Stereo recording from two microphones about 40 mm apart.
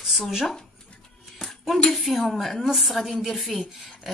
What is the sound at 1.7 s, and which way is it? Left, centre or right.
Speech, centre.